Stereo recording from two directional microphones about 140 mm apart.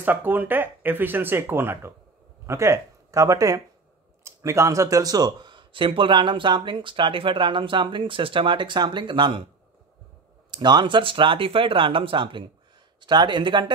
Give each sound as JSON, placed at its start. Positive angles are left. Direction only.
{"t": 0.0, "sound": "speech", "side_deg": -15}
{"t": 10.5, "sound": "speech", "side_deg": -30}